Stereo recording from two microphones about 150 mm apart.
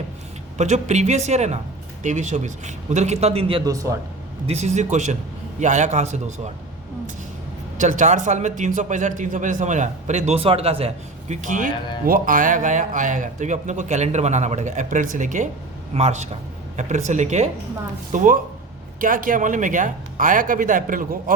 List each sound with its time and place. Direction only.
0.5 s speech: 50° right (ahead or behind)
3.6 s speech: 20° right (ahead or behind)
4.4 s speech: 50° right (ahead or behind)
7.8 s speech: 55° right (ahead or behind)
18.1 s speech: 60° right (ahead or behind)